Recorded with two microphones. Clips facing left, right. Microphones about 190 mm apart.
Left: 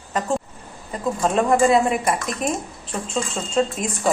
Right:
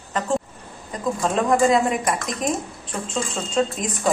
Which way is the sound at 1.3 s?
5° left (ahead or behind).